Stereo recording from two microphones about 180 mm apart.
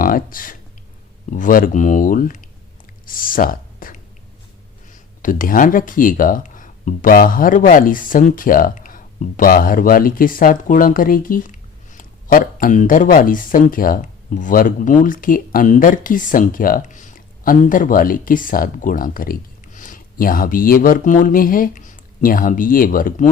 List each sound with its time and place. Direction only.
0.0 s speech: 50° left (ahead or behind)
5.2 s speech: 50° left (ahead or behind)